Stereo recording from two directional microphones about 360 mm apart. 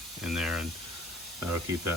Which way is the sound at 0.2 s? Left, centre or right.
Centre.